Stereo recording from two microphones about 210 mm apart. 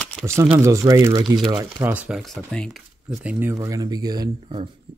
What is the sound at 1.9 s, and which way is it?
Speech, 5° right (ahead or behind).